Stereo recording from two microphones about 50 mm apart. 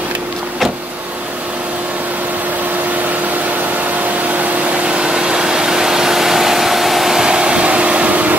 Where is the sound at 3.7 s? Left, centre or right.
Right.